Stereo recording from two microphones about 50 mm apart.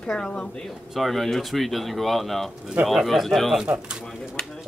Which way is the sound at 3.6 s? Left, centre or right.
Centre.